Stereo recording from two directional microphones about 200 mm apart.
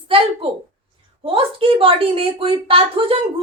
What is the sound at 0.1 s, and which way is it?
A woman's voice, 25° right (ahead or behind).